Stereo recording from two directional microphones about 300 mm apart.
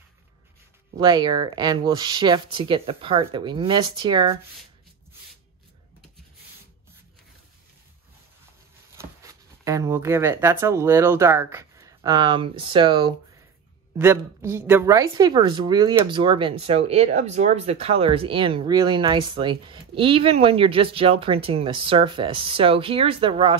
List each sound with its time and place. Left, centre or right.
0.9 s speech: centre
8.9 s speech: centre